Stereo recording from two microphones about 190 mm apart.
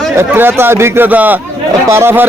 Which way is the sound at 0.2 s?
10° right (ahead or behind).